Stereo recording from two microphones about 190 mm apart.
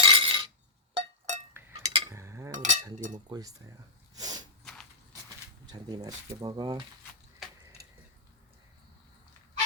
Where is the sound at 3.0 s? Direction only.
40° right (ahead or behind).